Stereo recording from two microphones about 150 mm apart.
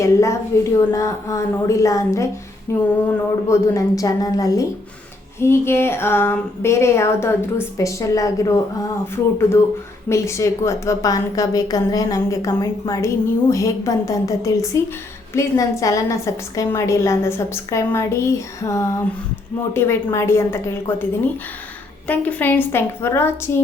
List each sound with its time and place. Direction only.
0.0 s a woman's voice: 20° left (ahead or behind)
10.1 s a woman's voice: 20° left (ahead or behind)